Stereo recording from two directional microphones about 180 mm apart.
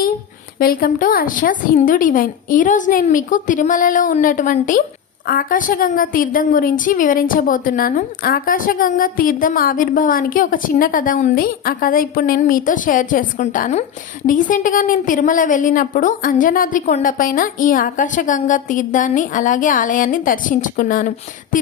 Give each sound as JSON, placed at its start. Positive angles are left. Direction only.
{"t": 0.6, "sound": "a woman's voice", "side_deg": 55}